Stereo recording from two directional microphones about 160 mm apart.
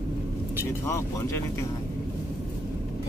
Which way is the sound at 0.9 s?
15° left (ahead or behind).